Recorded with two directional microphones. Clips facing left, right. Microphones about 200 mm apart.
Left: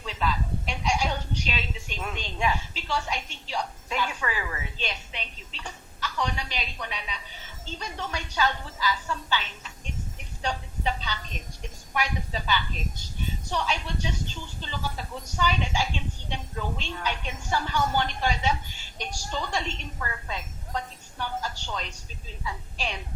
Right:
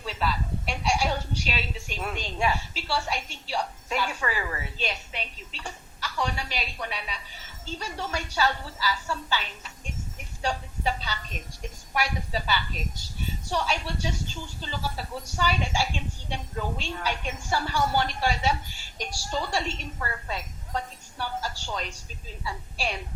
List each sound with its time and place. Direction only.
0.3 s a sound: 10° right (ahead or behind)
1.9 s a woman's voice: 10° right (ahead or behind)
4.3 s a woman's voice: 40° right (ahead or behind)
4.8 s a woman's voice: 10° right (ahead or behind)
5.5 s a sound: 10° right (ahead or behind)
7.6 s a woman's voice: 10° right (ahead or behind)
10.4 s a sound: 10° right (ahead or behind)
12.5 s a woman's voice: 10° right (ahead or behind)
21.2 s a woman's voice: 10° right (ahead or behind)